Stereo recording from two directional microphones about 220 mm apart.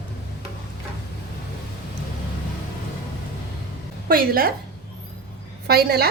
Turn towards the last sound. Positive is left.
turn(degrees=-45)  # may be behind; listen again after turning